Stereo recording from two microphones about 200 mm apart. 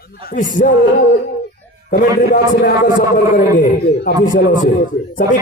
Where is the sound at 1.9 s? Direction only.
45° left (ahead or behind).